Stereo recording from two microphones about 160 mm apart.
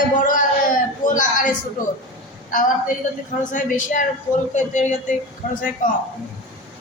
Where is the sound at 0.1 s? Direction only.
55° left (ahead or behind).